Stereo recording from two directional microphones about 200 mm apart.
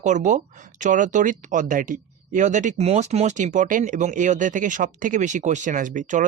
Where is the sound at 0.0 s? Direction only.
40° right (ahead or behind).